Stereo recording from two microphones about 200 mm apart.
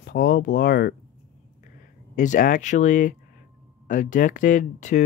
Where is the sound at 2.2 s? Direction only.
40° left (ahead or behind).